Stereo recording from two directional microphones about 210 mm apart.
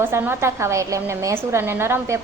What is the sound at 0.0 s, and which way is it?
A woman's voice, 10° right (ahead or behind).